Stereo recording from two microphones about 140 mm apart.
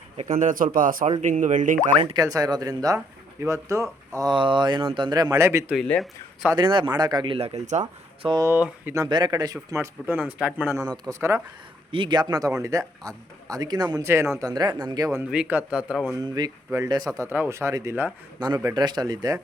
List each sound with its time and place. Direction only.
0.3 s speech: 70° right (ahead or behind)
1.0 s speech: 60° right (ahead or behind)
2.1 s speech: 25° right (ahead or behind)
5.7 s speech: 5° left (ahead or behind)
6.6 s speech: 35° right (ahead or behind)
7.3 s speech: 50° right (ahead or behind)
8.4 s speech: 15° right (ahead or behind)
9.0 s speech: 30° right (ahead or behind); by 10.8 s 10° right (ahead or behind)
10.8 s speech: 30° right (ahead or behind)
11.9 s speech: 35° right (ahead or behind)
15.2 s speech: 10° right (ahead or behind)
16.1 s speech: 25° right (ahead or behind)
17.2 s speech: 15° right (ahead or behind)
18.3 s speech: 30° right (ahead or behind)